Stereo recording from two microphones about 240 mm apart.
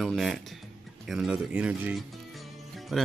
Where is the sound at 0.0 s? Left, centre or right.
Centre.